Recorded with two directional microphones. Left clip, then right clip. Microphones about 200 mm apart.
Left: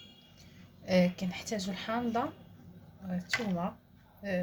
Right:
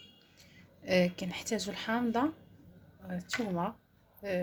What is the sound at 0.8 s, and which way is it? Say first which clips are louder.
A woman's voice: even; 40° right (ahead or behind).